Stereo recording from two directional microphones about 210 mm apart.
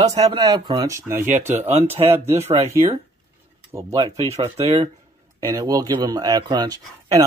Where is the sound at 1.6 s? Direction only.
30° right (ahead or behind).